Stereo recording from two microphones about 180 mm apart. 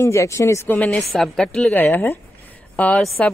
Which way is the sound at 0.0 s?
15° left (ahead or behind).